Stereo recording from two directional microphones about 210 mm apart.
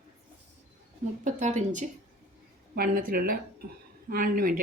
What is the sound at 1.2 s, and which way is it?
A woman's voice, 35° right (ahead or behind).